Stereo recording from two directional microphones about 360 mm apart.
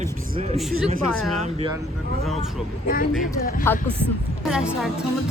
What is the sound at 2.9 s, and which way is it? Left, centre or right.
Speech, left.